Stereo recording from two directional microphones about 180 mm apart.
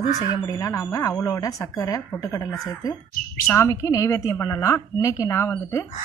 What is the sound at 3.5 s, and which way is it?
A woman's voice, 15° left (ahead or behind).